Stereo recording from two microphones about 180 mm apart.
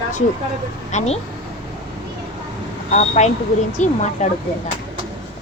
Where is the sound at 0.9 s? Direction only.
40° left (ahead or behind).